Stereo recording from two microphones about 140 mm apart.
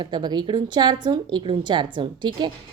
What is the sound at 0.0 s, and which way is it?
A woman's voice, 30° right (ahead or behind).